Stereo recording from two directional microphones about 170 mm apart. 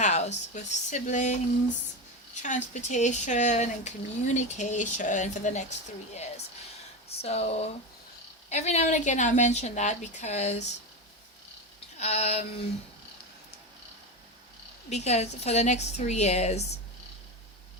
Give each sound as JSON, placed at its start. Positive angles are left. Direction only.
{"t": 0.0, "sound": "speech", "side_deg": 40}
{"t": 2.4, "sound": "speech", "side_deg": 45}
{"t": 7.2, "sound": "a woman's voice", "side_deg": 40}
{"t": 11.9, "sound": "a woman's voice", "side_deg": 40}
{"t": 14.8, "sound": "a woman's voice", "side_deg": 40}